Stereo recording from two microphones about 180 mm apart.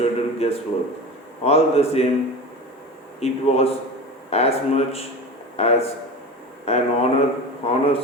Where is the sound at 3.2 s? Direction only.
35° left (ahead or behind).